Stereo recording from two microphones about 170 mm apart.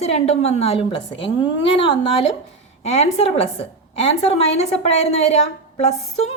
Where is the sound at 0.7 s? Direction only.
90° left.